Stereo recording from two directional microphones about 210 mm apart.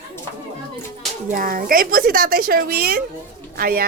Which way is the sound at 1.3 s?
40° right (ahead or behind).